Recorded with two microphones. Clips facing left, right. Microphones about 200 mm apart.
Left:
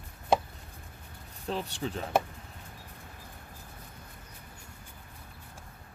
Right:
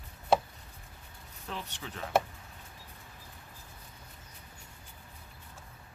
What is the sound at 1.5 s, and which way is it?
Speech, 30° left (ahead or behind).